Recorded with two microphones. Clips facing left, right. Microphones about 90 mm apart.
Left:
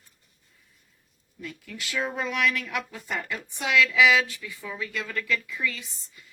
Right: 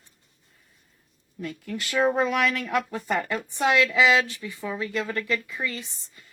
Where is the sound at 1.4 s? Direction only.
50° right (ahead or behind).